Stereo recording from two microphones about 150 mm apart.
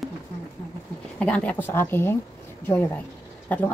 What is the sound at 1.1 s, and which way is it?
Speech, 10° left (ahead or behind).